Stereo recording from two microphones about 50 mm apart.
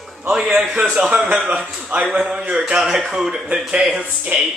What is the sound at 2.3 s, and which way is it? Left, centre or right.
Speech, centre.